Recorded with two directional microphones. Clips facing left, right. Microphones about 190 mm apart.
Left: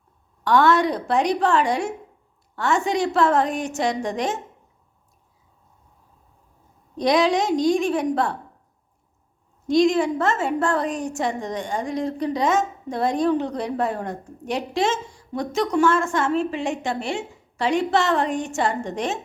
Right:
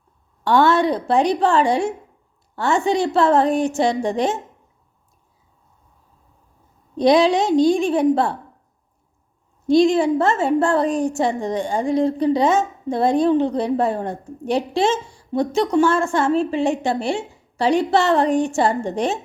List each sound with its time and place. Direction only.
0.4 s a woman's voice: 30° right (ahead or behind)
6.9 s a woman's voice: 30° right (ahead or behind)
9.6 s a woman's voice: 30° right (ahead or behind)